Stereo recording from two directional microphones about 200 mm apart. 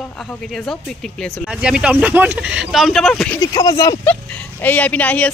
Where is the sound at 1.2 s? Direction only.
Centre (ahead or behind).